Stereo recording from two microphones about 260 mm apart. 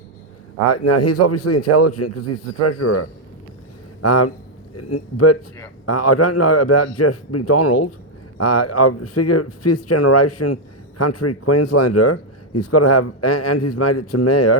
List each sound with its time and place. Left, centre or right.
0.7 s speech: left